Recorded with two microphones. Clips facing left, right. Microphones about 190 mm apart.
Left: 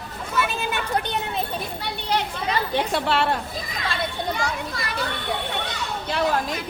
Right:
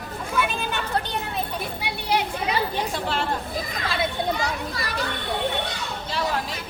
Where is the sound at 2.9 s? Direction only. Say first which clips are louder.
Left 4 dB; 70° left (ahead or behind).